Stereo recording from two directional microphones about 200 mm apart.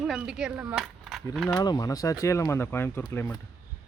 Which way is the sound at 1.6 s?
20° left (ahead or behind).